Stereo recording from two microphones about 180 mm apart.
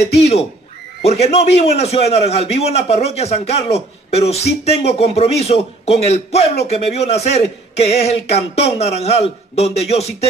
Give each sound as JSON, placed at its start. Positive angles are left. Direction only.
{"t": 1.0, "sound": "a man's voice", "side_deg": 35}